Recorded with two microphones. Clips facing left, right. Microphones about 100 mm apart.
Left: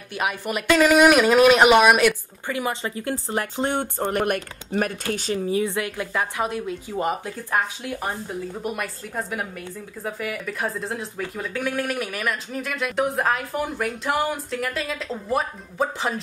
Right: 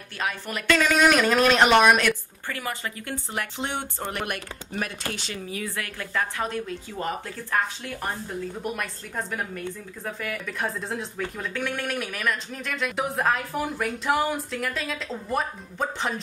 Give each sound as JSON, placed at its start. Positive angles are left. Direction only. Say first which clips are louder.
{"t": 0.1, "sound": "speech", "louder": "left 5 dB", "side_deg": 15}
{"t": 2.4, "sound": "speech", "louder": "left 5 dB", "side_deg": 20}
{"t": 3.3, "sound": "speech", "louder": "left 5 dB", "side_deg": 40}
{"t": 5.5, "sound": "speech", "louder": "left 8 dB", "side_deg": 25}